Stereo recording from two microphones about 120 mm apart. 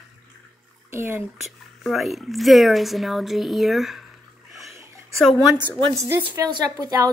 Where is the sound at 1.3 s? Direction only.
Centre (ahead or behind).